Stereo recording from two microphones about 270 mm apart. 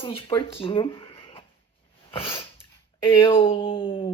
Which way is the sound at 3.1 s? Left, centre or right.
Centre.